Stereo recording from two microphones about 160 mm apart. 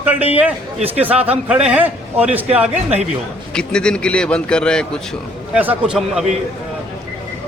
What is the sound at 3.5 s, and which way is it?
A man's voice, 5° left (ahead or behind).